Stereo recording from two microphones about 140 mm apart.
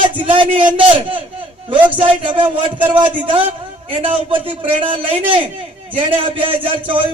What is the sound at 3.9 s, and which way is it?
A man's voice, 40° right (ahead or behind).